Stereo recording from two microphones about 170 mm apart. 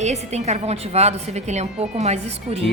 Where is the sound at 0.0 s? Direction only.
40° right (ahead or behind).